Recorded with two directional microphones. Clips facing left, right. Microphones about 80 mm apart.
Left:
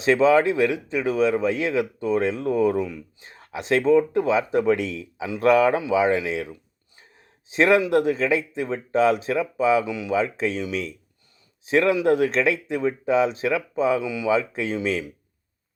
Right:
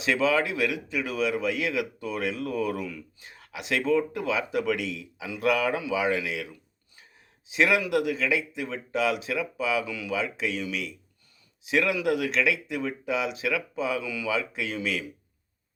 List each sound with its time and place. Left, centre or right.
0.0 s speech: left
10.2 s speech: left